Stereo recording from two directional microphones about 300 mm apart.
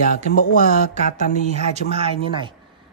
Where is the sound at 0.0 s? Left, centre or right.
Left.